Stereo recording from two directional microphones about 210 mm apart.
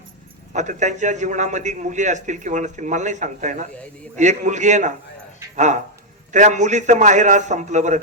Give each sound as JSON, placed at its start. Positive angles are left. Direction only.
{"t": 0.5, "sound": "a man's voice", "side_deg": -35}